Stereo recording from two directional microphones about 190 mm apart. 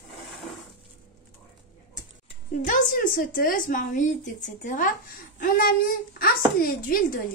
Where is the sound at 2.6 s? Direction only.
45° left (ahead or behind).